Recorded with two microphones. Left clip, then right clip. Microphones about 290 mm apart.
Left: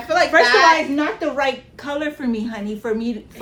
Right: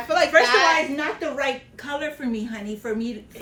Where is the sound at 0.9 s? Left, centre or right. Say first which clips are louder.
Left 5 dB; centre.